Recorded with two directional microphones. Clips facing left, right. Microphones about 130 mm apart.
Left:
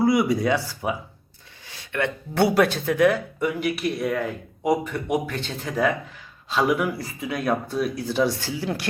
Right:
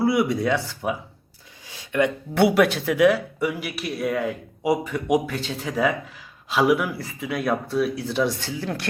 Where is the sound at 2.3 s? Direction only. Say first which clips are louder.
Right 1 dB; centre (ahead or behind).